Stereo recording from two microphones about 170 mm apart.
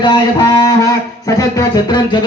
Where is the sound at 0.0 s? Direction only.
25° left (ahead or behind).